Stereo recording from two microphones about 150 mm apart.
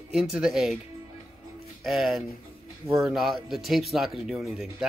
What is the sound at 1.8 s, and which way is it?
Speech, centre (ahead or behind).